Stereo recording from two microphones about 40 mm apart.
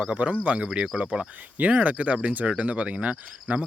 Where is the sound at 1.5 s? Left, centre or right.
Right.